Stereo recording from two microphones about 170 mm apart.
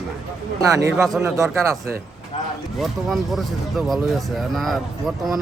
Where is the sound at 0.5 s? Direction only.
20° right (ahead or behind).